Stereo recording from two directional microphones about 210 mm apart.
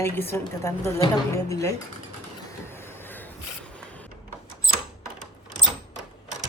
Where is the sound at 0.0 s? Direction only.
10° left (ahead or behind).